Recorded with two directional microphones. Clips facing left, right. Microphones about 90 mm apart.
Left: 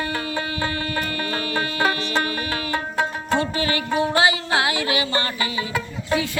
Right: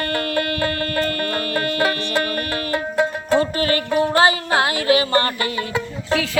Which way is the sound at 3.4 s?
45° right (ahead or behind).